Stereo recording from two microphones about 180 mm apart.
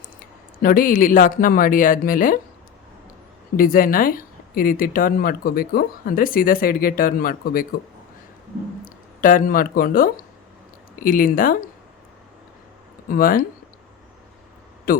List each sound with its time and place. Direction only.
0.6 s speech: 50° left (ahead or behind)
3.6 s speech: 50° left (ahead or behind)
8.8 s speech: 50° left (ahead or behind)
13.1 s speech: 50° left (ahead or behind)
14.9 s a man's voice: 55° left (ahead or behind)